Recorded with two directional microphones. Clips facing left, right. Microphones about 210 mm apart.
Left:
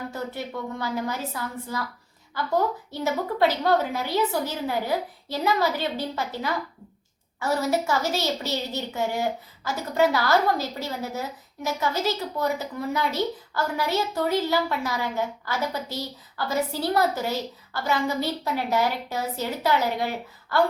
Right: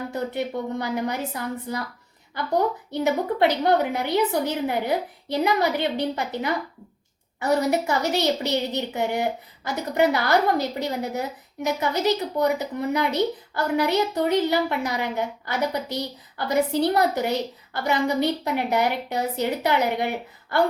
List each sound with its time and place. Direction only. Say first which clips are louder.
0.1 s a woman's voice: right 5 dB; 20° right (ahead or behind)